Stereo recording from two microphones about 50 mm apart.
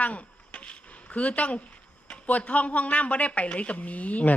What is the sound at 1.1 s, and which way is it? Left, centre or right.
A woman's voice, left.